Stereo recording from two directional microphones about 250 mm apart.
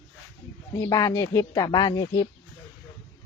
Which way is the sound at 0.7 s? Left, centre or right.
Centre.